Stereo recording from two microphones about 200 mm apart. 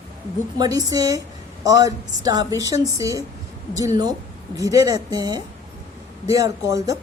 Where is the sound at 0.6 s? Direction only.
20° right (ahead or behind).